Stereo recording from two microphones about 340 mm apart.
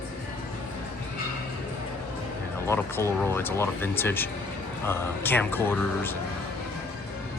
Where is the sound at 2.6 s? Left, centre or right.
Centre.